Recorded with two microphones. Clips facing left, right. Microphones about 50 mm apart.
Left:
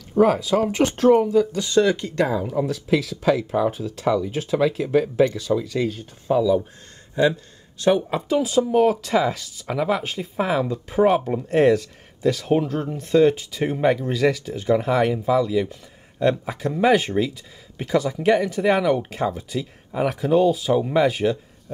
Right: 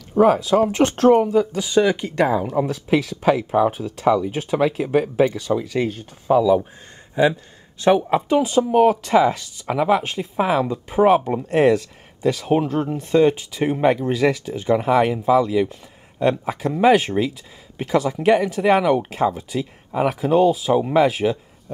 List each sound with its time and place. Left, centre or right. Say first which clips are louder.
0.1 s speech: right 2 dB; centre
1.1 s speech: right 1 dB; right
3.8 s speech: right 3 dB; centre
7.8 s speech: right 3 dB; right
9.0 s speech: right 4 dB; centre
9.7 s speech: right 4 dB; centre